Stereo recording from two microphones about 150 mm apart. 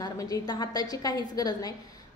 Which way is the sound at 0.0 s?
25° left (ahead or behind).